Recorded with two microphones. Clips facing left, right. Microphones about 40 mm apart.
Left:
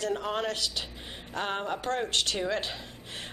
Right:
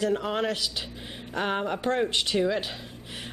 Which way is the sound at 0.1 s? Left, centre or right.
Centre.